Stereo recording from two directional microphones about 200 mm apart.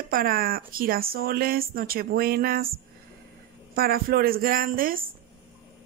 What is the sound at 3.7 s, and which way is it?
A woman's voice, 50° right (ahead or behind).